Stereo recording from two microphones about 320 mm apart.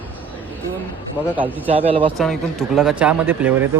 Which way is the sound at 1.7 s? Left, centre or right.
Centre.